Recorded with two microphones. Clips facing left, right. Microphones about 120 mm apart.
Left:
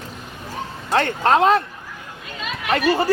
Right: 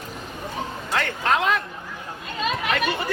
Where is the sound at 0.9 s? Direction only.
35° left (ahead or behind).